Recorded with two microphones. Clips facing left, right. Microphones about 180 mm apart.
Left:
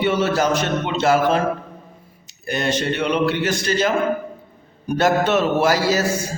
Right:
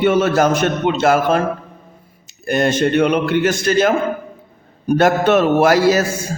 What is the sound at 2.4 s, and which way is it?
A man's voice, 50° right (ahead or behind).